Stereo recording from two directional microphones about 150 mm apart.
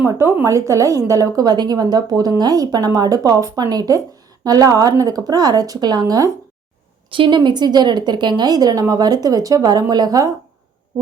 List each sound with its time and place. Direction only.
0.0 s a woman's voice: 15° right (ahead or behind)